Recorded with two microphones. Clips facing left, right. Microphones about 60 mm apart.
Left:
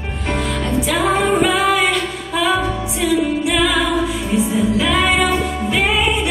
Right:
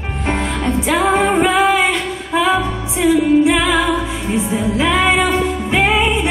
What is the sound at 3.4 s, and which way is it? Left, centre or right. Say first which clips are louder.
Music: right 2 dB; right.